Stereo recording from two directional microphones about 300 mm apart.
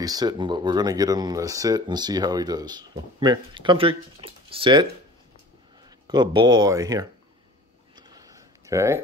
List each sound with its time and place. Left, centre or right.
0.0 s speech: centre
6.0 s speech: centre
7.9 s a sound: centre